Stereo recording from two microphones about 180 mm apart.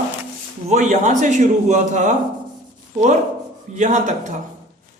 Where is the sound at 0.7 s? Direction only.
40° right (ahead or behind).